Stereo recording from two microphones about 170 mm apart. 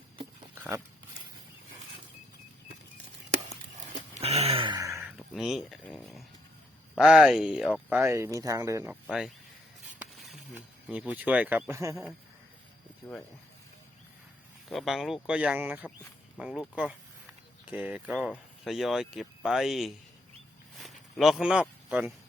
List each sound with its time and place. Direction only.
0.5 s dog: 15° right (ahead or behind)
4.1 s a sound: 40° right (ahead or behind); by 5.0 s 20° right (ahead or behind)
5.1 s dog: centre (ahead or behind)
6.9 s speech: 5° right (ahead or behind)
9.0 s speech: 5° right (ahead or behind)
10.0 s a sound: centre (ahead or behind)
10.8 s speech: 5° right (ahead or behind)
14.7 s speech: centre (ahead or behind)
20.7 s a sound: centre (ahead or behind)